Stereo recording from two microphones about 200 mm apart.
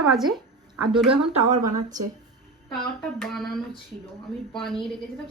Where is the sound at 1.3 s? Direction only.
35° right (ahead or behind).